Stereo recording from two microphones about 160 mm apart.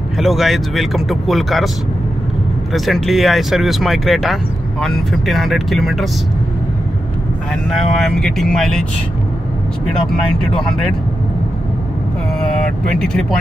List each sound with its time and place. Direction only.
0.2 s speech: centre (ahead or behind)
2.7 s speech: centre (ahead or behind)
7.7 s speech: centre (ahead or behind)
10.4 s speech: 5° left (ahead or behind)
12.4 s vehicle: 5° left (ahead or behind)